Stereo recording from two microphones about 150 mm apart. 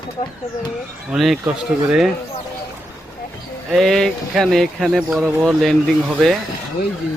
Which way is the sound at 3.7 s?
Centre (ahead or behind).